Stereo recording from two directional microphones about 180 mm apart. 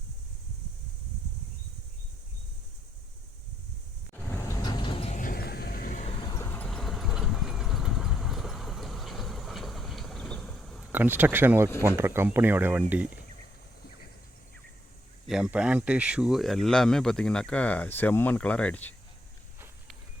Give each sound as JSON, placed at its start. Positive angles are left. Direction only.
{"t": 4.1, "sound": "a sound", "side_deg": 10}
{"t": 4.6, "sound": "vehicle", "side_deg": 25}
{"t": 5.2, "sound": "a sound", "side_deg": 60}
{"t": 6.1, "sound": "vehicle", "side_deg": 25}
{"t": 10.9, "sound": "speech", "side_deg": -10}
{"t": 15.3, "sound": "speech", "side_deg": -5}